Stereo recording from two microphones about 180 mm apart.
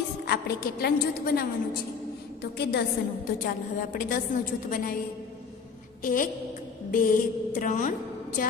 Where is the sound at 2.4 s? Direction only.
65° left (ahead or behind).